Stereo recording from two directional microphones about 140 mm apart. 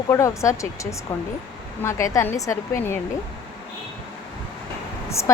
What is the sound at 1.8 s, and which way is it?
Speech, 20° left (ahead or behind).